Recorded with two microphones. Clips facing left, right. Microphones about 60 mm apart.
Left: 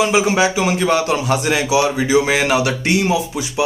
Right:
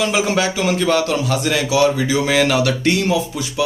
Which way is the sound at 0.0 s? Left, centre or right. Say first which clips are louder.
Left 3 dB; centre.